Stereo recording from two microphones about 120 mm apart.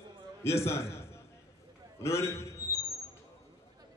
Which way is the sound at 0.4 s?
20° left (ahead or behind).